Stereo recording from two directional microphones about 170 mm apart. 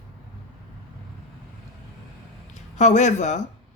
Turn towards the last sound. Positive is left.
turn(degrees=45)  # may be behind; listen again after turning